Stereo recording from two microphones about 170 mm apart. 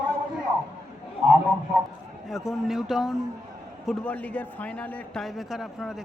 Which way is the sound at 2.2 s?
Centre (ahead or behind).